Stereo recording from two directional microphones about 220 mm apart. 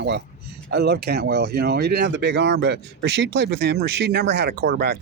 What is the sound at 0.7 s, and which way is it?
Speech, 45° right (ahead or behind).